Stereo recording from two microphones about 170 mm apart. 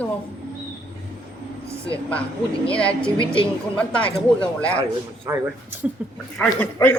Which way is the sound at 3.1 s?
30° left (ahead or behind).